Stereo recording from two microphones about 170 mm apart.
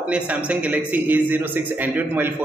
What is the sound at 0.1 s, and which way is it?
A man's voice, 10° right (ahead or behind).